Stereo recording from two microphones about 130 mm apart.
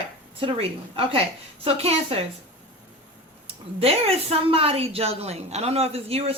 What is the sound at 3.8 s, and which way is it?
A woman's voice, 50° right (ahead or behind).